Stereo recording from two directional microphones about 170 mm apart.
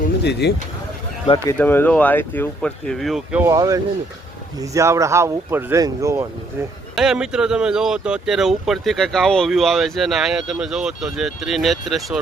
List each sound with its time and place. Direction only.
0.2 s speech: 80° left
1.5 s speech: 10° left (ahead or behind)
3.4 s speech: 20° right (ahead or behind)
6.9 s speech: 5° right (ahead or behind)